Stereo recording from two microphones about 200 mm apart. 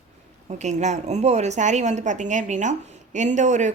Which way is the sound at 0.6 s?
35° right (ahead or behind).